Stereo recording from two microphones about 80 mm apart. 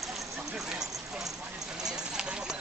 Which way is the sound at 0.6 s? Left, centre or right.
Centre.